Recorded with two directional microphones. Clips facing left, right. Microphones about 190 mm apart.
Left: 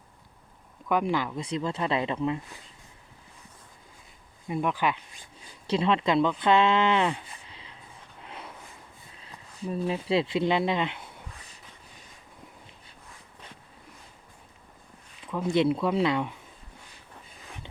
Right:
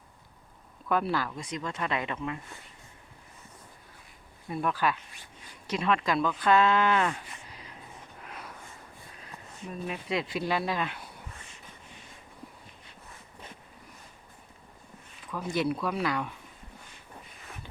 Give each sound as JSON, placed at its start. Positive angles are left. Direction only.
{"t": 0.9, "sound": "speech", "side_deg": 15}
{"t": 1.5, "sound": "speech", "side_deg": 30}
{"t": 4.4, "sound": "speech", "side_deg": 15}
{"t": 5.6, "sound": "speech", "side_deg": 25}
{"t": 7.3, "sound": "a sound", "side_deg": 25}
{"t": 9.1, "sound": "speech", "side_deg": 30}
{"t": 11.4, "sound": "a sound", "side_deg": 35}
{"t": 15.3, "sound": "speech", "side_deg": 25}